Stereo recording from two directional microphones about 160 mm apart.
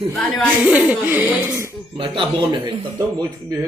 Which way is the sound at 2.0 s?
30° right (ahead or behind).